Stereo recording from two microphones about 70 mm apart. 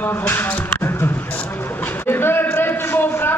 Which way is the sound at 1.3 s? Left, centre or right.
Left.